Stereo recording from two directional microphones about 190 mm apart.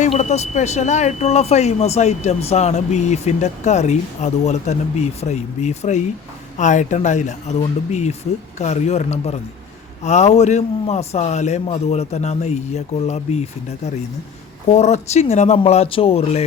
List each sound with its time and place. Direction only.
0.0 s speech: 35° left (ahead or behind)